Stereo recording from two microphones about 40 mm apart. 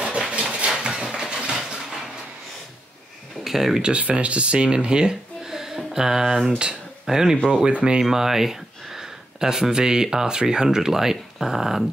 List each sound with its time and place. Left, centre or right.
0.0 s a sound: right
3.4 s speech: centre
3.8 s speech: right
5.5 s a sound: centre
7.1 s speech: centre
8.0 s speech: centre